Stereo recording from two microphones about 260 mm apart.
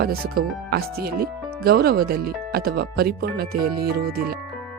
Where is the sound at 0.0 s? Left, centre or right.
Right.